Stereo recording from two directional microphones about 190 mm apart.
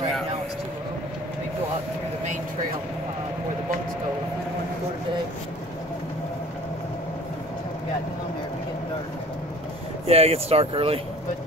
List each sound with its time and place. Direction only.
10.0 s speech: 30° right (ahead or behind)